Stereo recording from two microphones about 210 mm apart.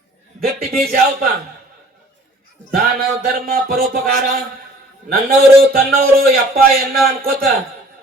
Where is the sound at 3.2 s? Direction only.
50° right (ahead or behind).